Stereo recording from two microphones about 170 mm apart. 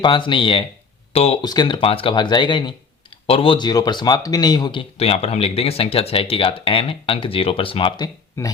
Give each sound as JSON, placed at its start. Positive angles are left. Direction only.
{"t": 0.0, "sound": "speech", "side_deg": 30}
{"t": 1.5, "sound": "speech", "side_deg": 25}